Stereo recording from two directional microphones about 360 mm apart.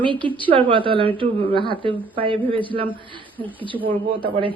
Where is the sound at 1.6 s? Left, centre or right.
Centre.